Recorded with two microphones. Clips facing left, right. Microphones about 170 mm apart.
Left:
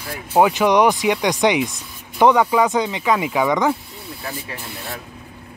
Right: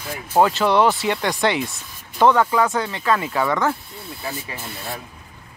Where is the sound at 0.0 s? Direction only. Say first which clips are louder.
Left 1 dB; 10° left (ahead or behind).